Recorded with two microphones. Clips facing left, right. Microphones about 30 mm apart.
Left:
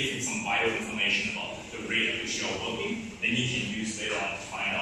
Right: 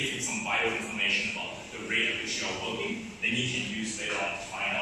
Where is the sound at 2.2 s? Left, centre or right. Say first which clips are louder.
Left 1 dB; right.